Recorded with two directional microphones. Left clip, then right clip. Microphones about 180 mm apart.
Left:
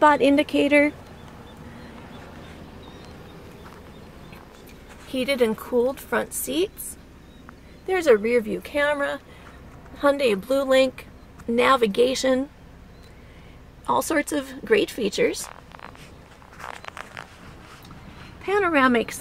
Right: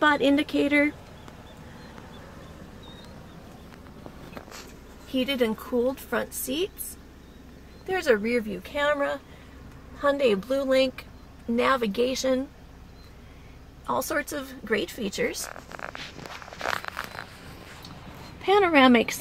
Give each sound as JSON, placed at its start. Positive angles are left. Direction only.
{"t": 0.0, "sound": "speech", "side_deg": 15}
{"t": 5.1, "sound": "a woman's voice", "side_deg": 30}
{"t": 7.8, "sound": "a woman's voice", "side_deg": 35}
{"t": 13.8, "sound": "speech", "side_deg": 45}
{"t": 18.4, "sound": "speech", "side_deg": -30}